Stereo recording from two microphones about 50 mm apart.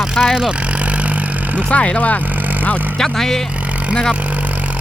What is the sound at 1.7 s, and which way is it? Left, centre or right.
Speech, left.